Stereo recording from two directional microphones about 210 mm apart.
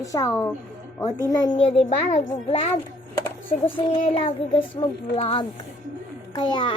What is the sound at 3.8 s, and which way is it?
A child's voice, 25° left (ahead or behind).